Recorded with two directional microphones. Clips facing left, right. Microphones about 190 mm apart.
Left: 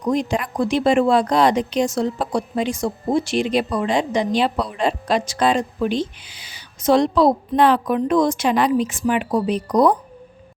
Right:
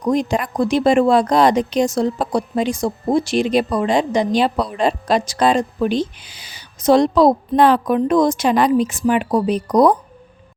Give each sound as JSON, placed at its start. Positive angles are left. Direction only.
{"t": 0.0, "sound": "speech", "side_deg": -40}